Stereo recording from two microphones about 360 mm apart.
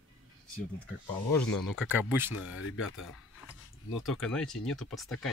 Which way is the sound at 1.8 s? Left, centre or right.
Centre.